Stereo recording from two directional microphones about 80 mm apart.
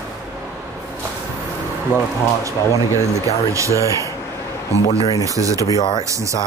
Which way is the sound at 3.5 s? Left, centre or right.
Right.